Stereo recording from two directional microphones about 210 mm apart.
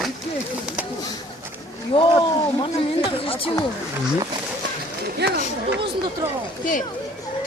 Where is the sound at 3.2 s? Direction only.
25° left (ahead or behind).